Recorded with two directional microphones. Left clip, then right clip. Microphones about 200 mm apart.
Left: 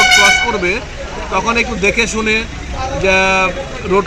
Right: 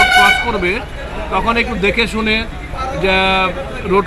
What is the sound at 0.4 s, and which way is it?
Speech, 5° left (ahead or behind).